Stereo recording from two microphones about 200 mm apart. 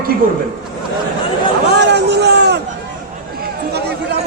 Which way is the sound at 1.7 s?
60° right (ahead or behind).